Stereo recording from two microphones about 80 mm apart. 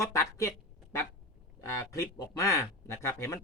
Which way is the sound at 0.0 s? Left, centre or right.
Left.